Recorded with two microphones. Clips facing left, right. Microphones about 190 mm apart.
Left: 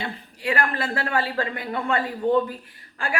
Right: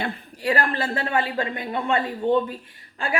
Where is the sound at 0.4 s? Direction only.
35° right (ahead or behind).